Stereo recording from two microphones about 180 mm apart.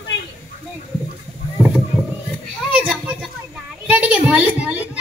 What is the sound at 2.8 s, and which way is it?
Children playing, 5° right (ahead or behind).